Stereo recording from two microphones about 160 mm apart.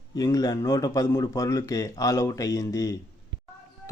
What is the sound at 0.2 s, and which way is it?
Speech, 25° left (ahead or behind).